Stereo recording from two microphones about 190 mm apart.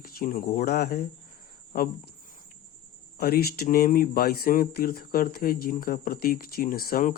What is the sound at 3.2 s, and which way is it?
Speech, 50° left (ahead or behind).